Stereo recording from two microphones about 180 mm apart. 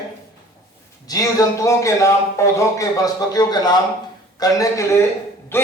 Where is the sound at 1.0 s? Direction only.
20° left (ahead or behind).